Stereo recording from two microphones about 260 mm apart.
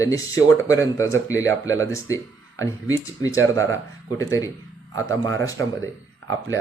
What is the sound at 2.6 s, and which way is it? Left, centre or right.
Speech, centre.